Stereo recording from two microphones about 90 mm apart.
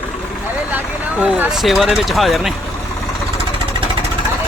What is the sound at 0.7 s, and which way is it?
Vehicle, 20° right (ahead or behind).